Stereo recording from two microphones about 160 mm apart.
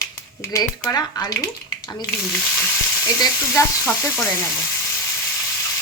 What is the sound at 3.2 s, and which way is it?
Speech, 20° left (ahead or behind).